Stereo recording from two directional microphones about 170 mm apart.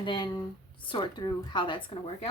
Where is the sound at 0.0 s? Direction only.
30° left (ahead or behind).